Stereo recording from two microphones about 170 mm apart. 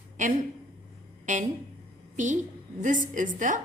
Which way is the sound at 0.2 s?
50° right (ahead or behind).